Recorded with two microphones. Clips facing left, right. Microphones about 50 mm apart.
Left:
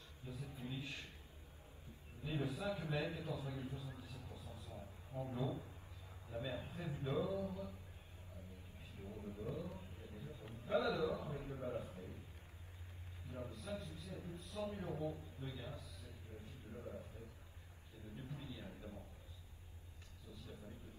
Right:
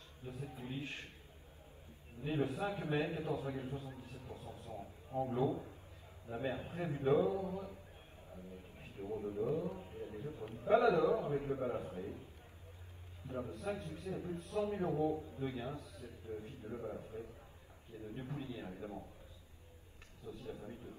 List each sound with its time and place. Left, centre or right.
0.2 s a man's voice: right
2.2 s a man's voice: right
8.7 s a sound: right
9.2 s a man's voice: right
13.3 s a man's voice: right
16.7 s a man's voice: right
18.1 s a man's voice: right
20.2 s a man's voice: right